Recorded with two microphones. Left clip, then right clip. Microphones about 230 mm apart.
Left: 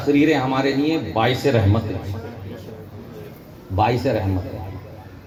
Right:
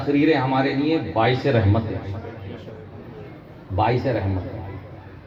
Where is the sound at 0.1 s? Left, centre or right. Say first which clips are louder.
Left 2 dB; left.